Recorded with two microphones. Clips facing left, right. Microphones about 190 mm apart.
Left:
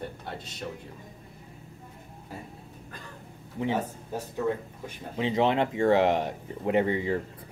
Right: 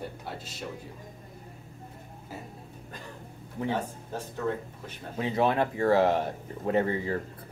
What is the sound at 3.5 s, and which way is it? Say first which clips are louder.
Speech: left 2 dB; 10° left (ahead or behind).